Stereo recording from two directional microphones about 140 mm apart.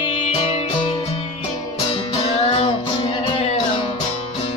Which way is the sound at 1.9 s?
45° left (ahead or behind).